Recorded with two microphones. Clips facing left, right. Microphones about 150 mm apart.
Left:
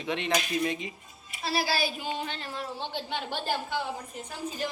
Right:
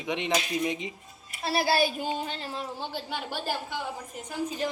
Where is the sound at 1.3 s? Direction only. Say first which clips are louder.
Right 3 dB; 50° right (ahead or behind); by 2.6 s 35° right (ahead or behind).